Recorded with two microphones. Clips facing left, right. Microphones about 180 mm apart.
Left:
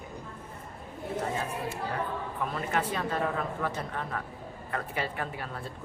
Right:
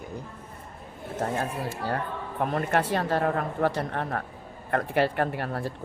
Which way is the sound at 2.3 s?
55° right (ahead or behind).